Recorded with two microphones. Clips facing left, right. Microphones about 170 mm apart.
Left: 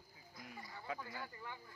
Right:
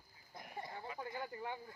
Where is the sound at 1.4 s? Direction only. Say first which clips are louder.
Right 7 dB; 50° right (ahead or behind).